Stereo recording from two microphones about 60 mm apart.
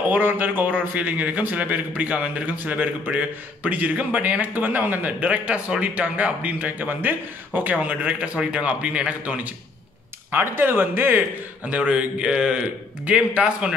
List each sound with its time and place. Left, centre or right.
0.1 s a man's voice: right
10.3 s speech: right
11.6 s speech: centre